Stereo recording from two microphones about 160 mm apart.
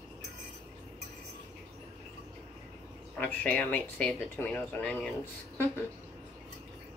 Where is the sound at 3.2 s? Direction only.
10° left (ahead or behind).